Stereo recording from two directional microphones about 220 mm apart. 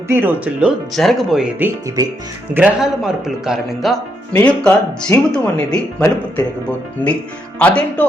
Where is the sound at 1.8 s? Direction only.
15° right (ahead or behind).